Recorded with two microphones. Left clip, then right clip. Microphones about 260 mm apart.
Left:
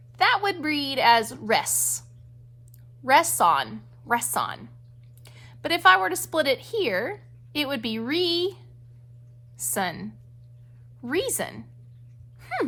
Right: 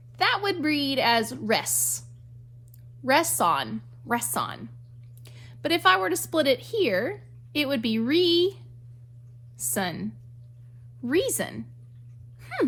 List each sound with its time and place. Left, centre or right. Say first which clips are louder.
0.2 s a woman's voice: left 2 dB; left
9.6 s a woman's voice: left 2 dB; left
12.4 s a sound: left 1 dB; left